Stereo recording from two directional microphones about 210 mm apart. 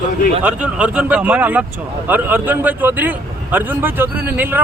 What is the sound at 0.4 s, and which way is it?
A man's voice, 5° right (ahead or behind).